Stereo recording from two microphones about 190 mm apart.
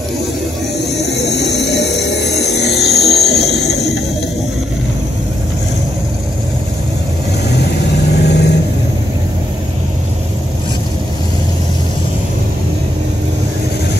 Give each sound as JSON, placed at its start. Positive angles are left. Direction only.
{"t": 1.1, "sound": "music", "side_deg": 60}
{"t": 8.1, "sound": "vehicle", "side_deg": 60}